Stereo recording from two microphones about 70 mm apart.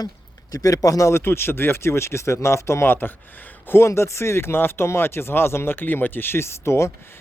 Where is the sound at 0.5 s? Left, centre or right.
Left.